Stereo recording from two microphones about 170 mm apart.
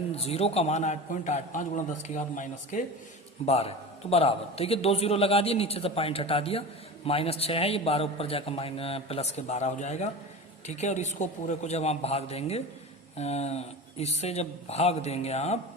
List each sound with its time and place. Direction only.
0.2 s a man's voice: 35° left (ahead or behind)
3.4 s a man's voice: 35° left (ahead or behind)